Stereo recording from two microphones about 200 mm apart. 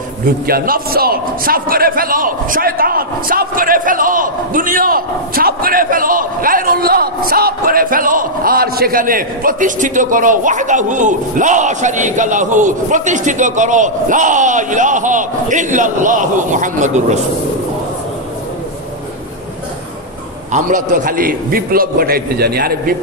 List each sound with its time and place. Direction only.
0.5 s a man's voice: 50° right (ahead or behind)
20.5 s a man's voice: 40° right (ahead or behind)